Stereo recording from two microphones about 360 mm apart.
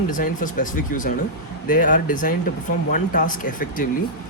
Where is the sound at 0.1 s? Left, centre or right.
Left.